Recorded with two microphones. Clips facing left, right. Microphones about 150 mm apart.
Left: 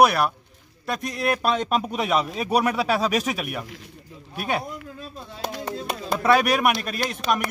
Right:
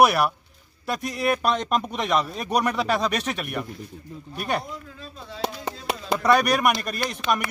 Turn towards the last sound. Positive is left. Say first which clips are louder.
# even
turn(degrees=0)  # may be behind; listen again after turning